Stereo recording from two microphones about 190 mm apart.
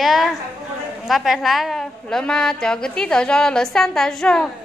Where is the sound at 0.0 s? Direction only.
Centre (ahead or behind).